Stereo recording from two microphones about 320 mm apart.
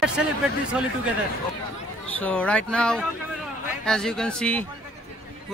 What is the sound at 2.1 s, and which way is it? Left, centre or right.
Speech, centre.